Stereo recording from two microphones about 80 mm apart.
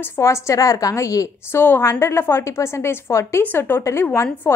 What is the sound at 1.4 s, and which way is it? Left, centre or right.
A woman's voice, left.